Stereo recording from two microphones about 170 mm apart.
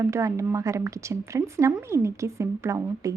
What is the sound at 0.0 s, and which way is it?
A woman's voice, 20° right (ahead or behind).